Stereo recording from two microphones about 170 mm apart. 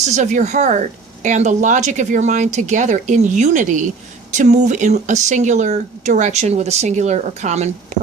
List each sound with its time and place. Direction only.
0.0 s speech: 45° right (ahead or behind)